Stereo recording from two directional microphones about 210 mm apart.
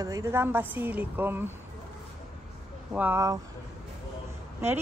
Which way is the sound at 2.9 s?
10° right (ahead or behind).